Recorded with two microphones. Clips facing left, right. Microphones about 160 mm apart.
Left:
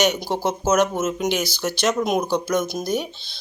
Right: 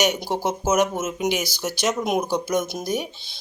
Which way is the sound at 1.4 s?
45° right (ahead or behind).